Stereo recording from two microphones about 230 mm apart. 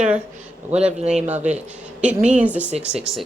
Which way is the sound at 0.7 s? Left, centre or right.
Right.